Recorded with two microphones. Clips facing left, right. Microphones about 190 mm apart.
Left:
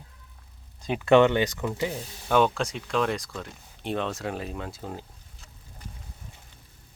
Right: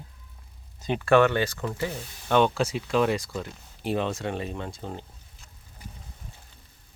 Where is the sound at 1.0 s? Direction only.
20° left (ahead or behind).